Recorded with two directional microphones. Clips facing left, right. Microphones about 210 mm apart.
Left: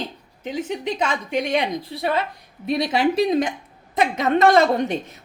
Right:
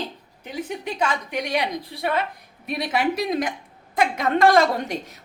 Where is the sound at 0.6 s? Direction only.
20° left (ahead or behind).